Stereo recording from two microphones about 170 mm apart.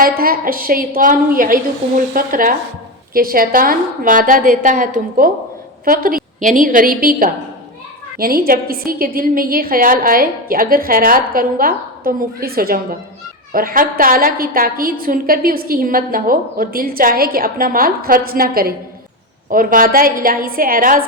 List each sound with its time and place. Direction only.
0.0 s a woman's voice: 60° right (ahead or behind)